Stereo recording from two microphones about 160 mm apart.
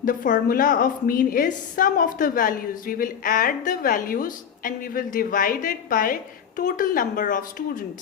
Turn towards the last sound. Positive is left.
turn(degrees=60)  # may be behind; listen again after turning